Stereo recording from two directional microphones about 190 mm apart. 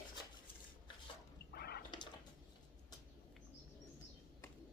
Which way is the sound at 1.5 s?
55° left (ahead or behind).